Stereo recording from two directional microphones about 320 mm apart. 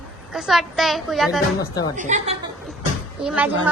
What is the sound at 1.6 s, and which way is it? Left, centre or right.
Speech, centre.